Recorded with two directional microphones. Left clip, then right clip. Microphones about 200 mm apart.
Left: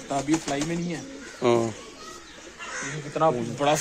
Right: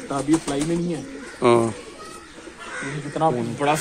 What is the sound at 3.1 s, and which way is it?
Speech, 35° left (ahead or behind).